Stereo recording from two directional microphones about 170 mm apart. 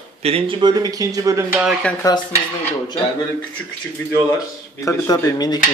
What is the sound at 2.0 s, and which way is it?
Speech, 20° left (ahead or behind).